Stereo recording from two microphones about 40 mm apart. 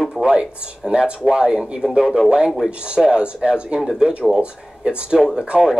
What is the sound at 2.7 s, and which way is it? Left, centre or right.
Speech, right.